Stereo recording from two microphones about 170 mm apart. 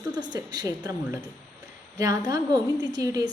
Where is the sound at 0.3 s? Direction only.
20° right (ahead or behind).